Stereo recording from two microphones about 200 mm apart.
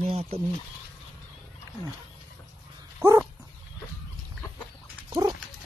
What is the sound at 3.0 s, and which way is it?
Dog, 10° right (ahead or behind).